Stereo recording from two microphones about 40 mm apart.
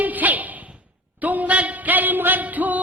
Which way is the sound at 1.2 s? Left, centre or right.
Right.